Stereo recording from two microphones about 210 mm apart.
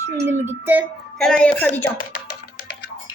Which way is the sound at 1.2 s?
5° left (ahead or behind).